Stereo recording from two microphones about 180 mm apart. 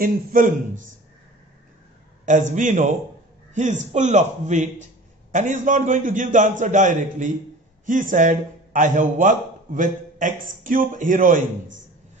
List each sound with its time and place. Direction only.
0.0 s a man's voice: 50° right (ahead or behind)
2.2 s a man's voice: 45° right (ahead or behind)